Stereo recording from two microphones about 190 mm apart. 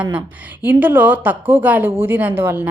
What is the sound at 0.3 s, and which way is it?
Speech, 10° right (ahead or behind).